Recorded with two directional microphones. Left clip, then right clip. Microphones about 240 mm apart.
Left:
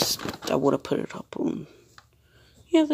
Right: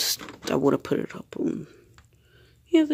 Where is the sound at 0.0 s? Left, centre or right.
Right.